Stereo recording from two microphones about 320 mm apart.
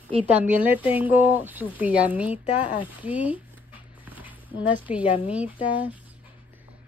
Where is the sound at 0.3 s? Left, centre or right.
Centre.